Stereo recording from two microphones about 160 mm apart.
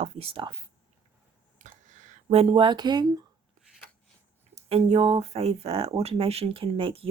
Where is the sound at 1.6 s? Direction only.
50° right (ahead or behind); by 3.2 s 25° right (ahead or behind).